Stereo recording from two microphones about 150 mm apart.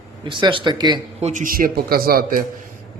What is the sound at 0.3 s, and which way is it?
Speech, 30° right (ahead or behind).